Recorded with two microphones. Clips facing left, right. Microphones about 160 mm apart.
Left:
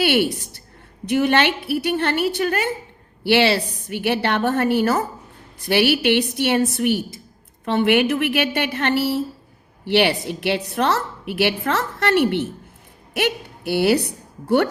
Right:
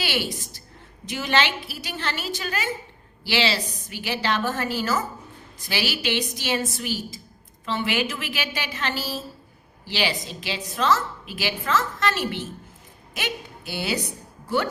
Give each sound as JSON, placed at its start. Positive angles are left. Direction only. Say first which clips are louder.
{"t": 0.0, "sound": "a woman's voice", "louder": "left 9 dB", "side_deg": 55}